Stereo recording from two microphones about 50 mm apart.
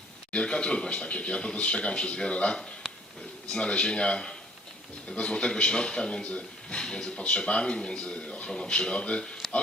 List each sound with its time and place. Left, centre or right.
0.3 s speech: left